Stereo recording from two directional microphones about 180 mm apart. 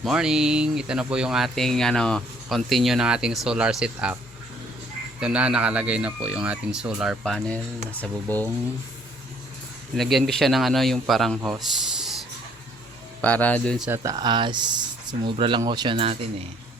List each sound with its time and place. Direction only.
0.0 s speech: 5° right (ahead or behind)
5.2 s speech: 5° right (ahead or behind); by 8.4 s 10° left (ahead or behind)
10.0 s speech: centre (ahead or behind)
13.2 s speech: 10° left (ahead or behind)
13.8 s speech: 15° right (ahead or behind)